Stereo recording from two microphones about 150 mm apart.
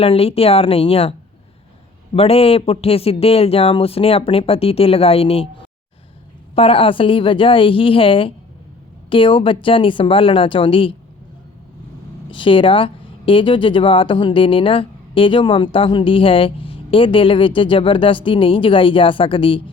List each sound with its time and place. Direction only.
0.0 s speech: 40° left (ahead or behind)
2.1 s speech: 40° left (ahead or behind)
6.6 s speech: 40° left (ahead or behind)
12.3 s speech: 35° left (ahead or behind)